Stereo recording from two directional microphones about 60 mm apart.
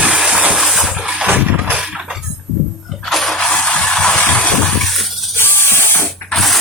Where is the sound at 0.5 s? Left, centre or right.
Centre.